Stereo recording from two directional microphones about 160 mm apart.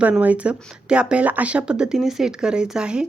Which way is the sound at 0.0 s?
10° right (ahead or behind).